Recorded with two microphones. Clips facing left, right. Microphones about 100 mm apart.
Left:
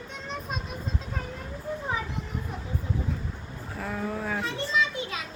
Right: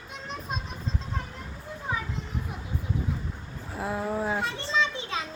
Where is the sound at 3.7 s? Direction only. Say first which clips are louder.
Right 3 dB; 20° right (ahead or behind).